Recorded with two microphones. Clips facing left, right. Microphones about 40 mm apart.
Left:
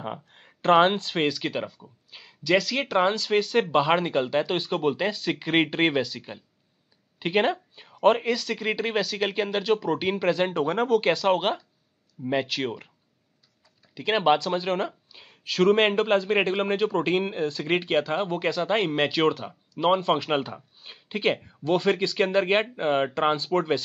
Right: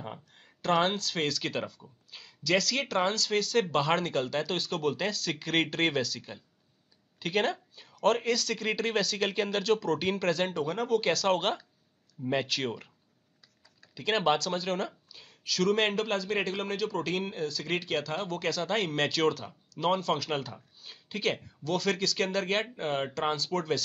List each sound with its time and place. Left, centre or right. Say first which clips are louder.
0.0 s speech: left 7 dB; left
10.5 s speech: left 6 dB; left
11.1 s speech: left 4 dB; centre
13.9 s speech: left 5 dB; centre